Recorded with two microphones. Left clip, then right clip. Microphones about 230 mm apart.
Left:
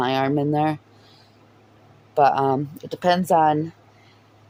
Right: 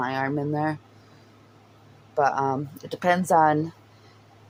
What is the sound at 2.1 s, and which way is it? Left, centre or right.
Speech, left.